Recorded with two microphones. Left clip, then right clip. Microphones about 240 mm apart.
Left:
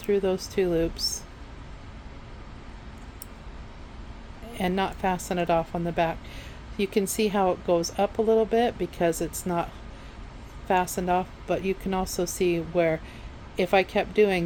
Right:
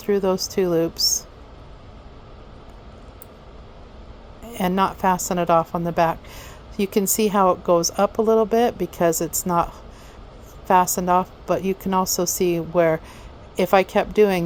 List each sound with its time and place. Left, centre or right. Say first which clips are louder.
0.0 s a woman's voice: right 4 dB; right
4.5 s a woman's voice: right 6 dB; right
10.7 s a woman's voice: right 7 dB; right